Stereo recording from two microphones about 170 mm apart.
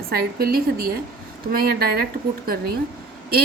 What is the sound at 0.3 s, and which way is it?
Speech, 60° right (ahead or behind).